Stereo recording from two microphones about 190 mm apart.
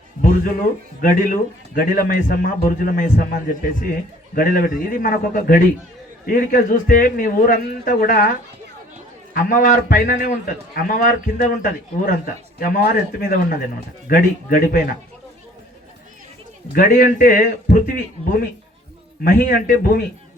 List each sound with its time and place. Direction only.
1.0 s a man's voice: 45° left (ahead or behind)
9.3 s a man's voice: 50° left (ahead or behind)
16.7 s a man's voice: 45° left (ahead or behind)